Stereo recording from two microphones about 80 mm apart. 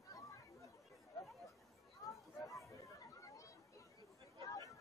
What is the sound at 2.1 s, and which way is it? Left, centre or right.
Chatter, left.